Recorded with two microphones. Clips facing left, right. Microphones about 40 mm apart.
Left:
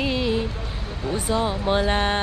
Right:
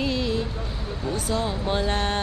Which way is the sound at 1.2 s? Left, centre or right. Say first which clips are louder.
Left 4 dB; left.